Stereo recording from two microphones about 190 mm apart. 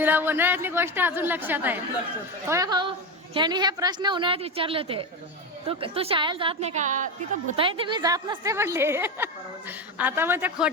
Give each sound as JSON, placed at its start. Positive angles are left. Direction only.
{"t": 0.0, "sound": "a woman's voice", "side_deg": -10}
{"t": 7.5, "sound": "a woman's voice", "side_deg": -30}